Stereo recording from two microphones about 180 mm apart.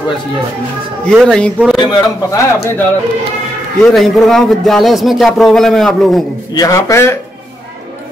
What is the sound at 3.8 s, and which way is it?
Speech, centre (ahead or behind).